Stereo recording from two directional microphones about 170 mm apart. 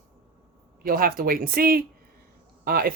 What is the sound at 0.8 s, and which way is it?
Speech, 60° right (ahead or behind).